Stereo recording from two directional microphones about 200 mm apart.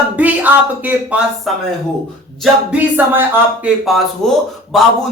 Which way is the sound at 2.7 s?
10° right (ahead or behind).